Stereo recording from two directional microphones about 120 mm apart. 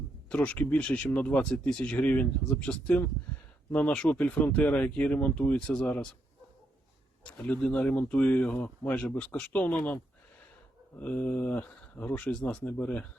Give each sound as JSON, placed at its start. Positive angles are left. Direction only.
{"t": 0.3, "sound": "speech", "side_deg": 10}
{"t": 7.3, "sound": "speech", "side_deg": 10}